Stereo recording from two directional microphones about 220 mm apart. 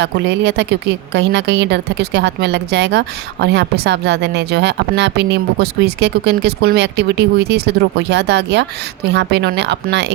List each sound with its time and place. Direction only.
0.0 s speech: 50° right (ahead or behind)